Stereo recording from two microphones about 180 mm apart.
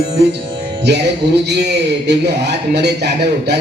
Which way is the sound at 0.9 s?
70° right (ahead or behind).